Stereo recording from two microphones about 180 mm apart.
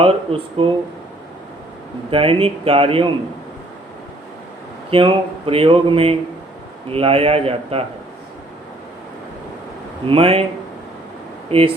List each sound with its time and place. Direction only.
0.0 s speech: 30° right (ahead or behind)
2.0 s speech: 30° right (ahead or behind)
4.9 s speech: 30° right (ahead or behind)
10.1 s speech: 35° right (ahead or behind)
11.4 s speech: 30° right (ahead or behind)